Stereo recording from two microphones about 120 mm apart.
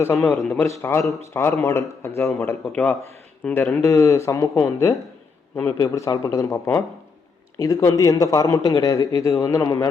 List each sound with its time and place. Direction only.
0.0 s speech: 20° left (ahead or behind)
3.8 s speech: 25° left (ahead or behind)
7.6 s speech: 25° left (ahead or behind)